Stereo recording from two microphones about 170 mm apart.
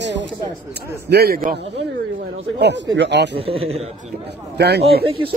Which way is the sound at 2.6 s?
90° right.